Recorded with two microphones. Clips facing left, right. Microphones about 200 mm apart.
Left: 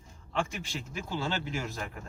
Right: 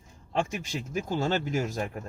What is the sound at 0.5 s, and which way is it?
Speech, 45° right (ahead or behind).